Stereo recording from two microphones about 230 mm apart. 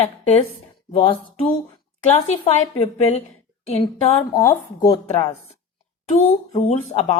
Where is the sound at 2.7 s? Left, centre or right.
Left; by 5.3 s centre.